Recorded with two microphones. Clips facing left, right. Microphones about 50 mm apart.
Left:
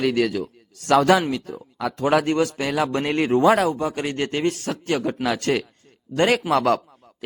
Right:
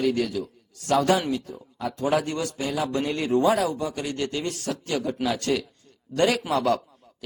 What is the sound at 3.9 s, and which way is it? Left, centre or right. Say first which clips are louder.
Speech: left 4 dB; left.